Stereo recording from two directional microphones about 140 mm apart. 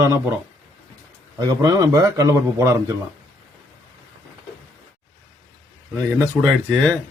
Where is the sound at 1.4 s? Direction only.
25° right (ahead or behind).